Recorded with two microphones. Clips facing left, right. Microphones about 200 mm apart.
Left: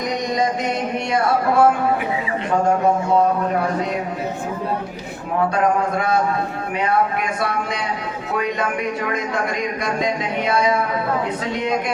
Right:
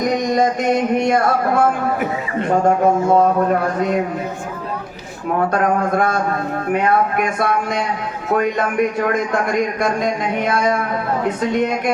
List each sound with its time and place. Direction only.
0.0 s a sound: 50° right (ahead or behind)
5.5 s a man's voice: 50° right (ahead or behind)
9.1 s a man's voice: 50° right (ahead or behind)